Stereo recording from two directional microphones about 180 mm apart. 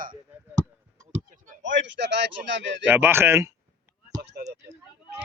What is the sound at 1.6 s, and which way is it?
A man's voice, 90° right.